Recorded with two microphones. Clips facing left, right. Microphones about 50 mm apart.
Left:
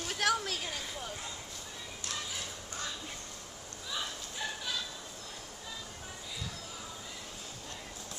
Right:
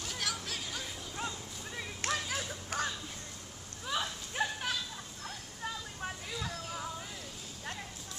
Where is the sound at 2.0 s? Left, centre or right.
Right.